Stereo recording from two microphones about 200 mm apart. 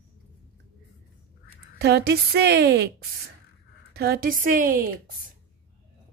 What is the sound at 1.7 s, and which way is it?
A woman's voice, 55° right (ahead or behind).